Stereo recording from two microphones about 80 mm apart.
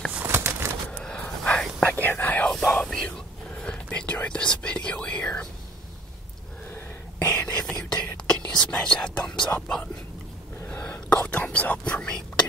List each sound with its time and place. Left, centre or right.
0.1 s bird: right
0.9 s a sound: centre
1.9 s whispering: left; by 3.1 s centre
3.6 s speech: centre
7.2 s whispering: centre
10.6 s whispering: left